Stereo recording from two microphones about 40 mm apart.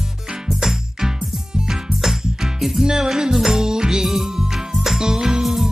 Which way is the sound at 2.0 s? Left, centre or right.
Centre.